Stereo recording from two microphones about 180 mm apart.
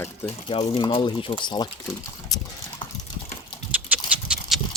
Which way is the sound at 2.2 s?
20° left (ahead or behind).